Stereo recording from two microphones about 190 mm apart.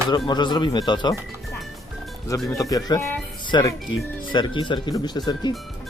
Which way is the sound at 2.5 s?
20° left (ahead or behind).